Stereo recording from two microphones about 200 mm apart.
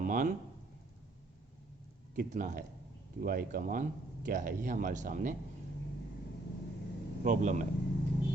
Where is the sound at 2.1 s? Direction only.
40° right (ahead or behind).